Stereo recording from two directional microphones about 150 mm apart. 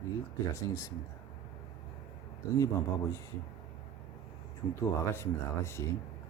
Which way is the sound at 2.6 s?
20° left (ahead or behind).